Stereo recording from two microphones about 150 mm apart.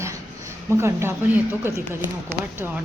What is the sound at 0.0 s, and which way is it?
A woman's voice, 20° right (ahead or behind).